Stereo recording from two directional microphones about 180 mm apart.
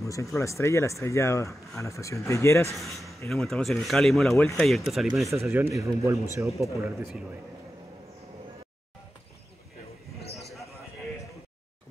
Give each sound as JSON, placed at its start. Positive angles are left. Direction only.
{"t": 0.0, "sound": "speech", "side_deg": 15}
{"t": 2.7, "sound": "a man's voice", "side_deg": 0}